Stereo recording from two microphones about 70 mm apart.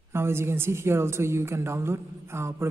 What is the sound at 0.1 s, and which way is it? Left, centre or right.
A woman's voice, right.